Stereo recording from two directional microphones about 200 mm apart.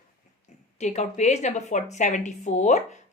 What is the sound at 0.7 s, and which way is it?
A woman's voice, 35° left (ahead or behind).